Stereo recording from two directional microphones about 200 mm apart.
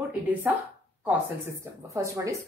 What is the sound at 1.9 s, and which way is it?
Speech, 15° right (ahead or behind).